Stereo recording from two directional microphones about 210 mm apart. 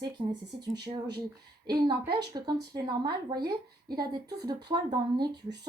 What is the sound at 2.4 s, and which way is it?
Speech, 20° right (ahead or behind).